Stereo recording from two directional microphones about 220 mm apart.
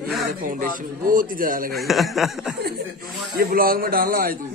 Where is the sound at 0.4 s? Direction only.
40° right (ahead or behind).